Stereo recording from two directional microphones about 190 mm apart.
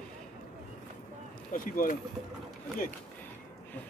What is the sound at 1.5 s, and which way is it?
Speech, 45° left (ahead or behind).